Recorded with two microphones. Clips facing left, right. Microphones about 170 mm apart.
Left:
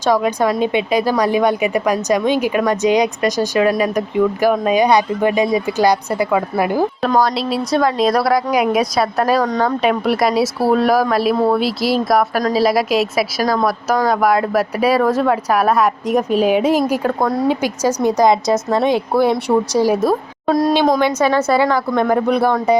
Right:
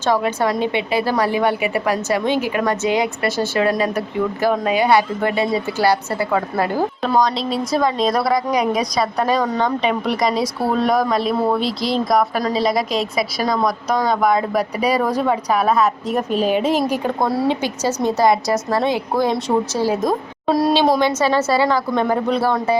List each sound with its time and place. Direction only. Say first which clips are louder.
0.0 s a woman's voice: left 3 dB; 15° left (ahead or behind)
20.5 s a woman's voice: left 2 dB; 5° right (ahead or behind)
21.0 s a woman's voice: left 2 dB; 10° left (ahead or behind)